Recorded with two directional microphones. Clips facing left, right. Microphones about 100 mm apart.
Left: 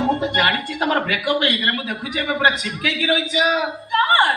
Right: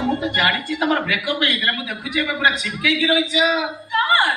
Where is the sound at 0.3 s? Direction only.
45° left (ahead or behind).